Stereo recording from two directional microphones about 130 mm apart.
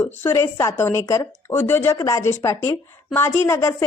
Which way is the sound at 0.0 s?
15° left (ahead or behind).